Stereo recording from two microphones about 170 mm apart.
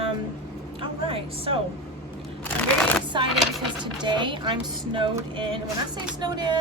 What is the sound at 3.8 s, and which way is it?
A woman's voice, 25° right (ahead or behind).